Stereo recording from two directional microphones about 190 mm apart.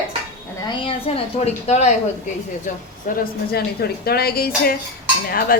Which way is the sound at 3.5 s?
55° left (ahead or behind).